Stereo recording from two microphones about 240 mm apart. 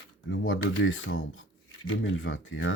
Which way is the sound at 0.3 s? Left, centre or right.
Left.